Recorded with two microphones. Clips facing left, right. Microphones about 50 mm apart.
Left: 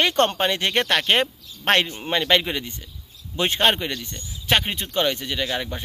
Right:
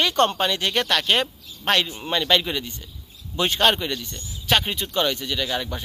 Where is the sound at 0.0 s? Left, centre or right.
Left.